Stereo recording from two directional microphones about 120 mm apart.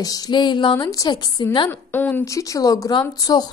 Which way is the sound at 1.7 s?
15° left (ahead or behind).